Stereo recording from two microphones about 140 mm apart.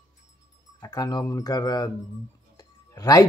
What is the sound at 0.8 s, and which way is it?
A man's voice, 25° left (ahead or behind).